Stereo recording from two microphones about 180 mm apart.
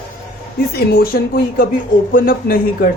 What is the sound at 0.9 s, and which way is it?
Speech, 55° left (ahead or behind).